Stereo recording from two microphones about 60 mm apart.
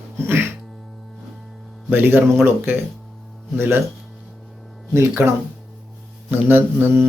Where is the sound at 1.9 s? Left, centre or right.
Right.